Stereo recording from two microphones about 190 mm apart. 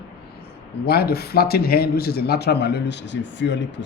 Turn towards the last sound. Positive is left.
turn(degrees=70)  # may be behind; listen again after turning